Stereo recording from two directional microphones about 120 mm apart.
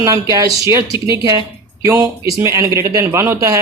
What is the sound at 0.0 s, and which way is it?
A man's voice, 30° right (ahead or behind).